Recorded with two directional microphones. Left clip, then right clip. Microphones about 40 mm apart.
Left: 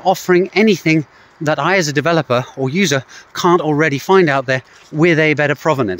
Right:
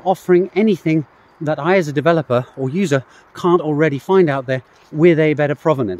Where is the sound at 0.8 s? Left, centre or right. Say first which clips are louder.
Left 3 dB; right.